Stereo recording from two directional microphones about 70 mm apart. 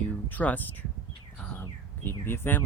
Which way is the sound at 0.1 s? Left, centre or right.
Left.